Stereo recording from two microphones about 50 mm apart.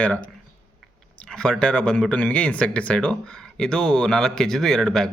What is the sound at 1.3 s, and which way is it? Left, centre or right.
A man's voice, centre.